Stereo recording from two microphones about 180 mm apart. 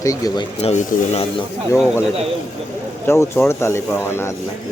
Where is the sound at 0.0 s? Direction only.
20° left (ahead or behind).